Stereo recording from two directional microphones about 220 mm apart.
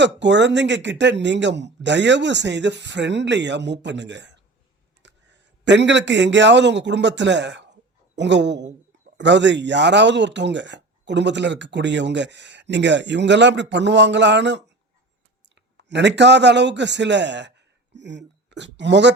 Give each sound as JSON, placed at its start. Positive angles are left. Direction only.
{"t": 0.0, "sound": "speech", "side_deg": -50}
{"t": 15.8, "sound": "speech", "side_deg": -50}